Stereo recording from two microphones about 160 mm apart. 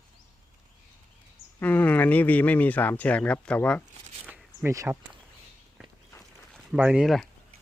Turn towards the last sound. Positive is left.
turn(degrees=0)  # may be behind; listen again after turning